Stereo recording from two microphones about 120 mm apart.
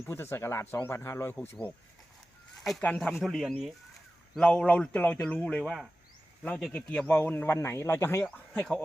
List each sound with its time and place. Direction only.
0.0 s speech: 20° left (ahead or behind)
3.1 s speech: 5° right (ahead or behind)
4.4 s speech: 10° left (ahead or behind)
5.6 s speech: centre (ahead or behind)
6.7 s speech: 10° left (ahead or behind)
8.5 s speech: 5° left (ahead or behind)